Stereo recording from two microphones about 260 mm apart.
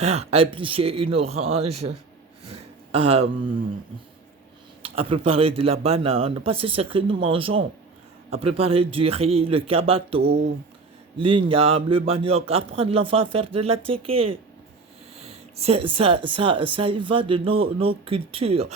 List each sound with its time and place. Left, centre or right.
0.0 s speech: right
2.4 s a sound: right
4.8 s speech: right
10.2 s speech: right
11.2 s speech: centre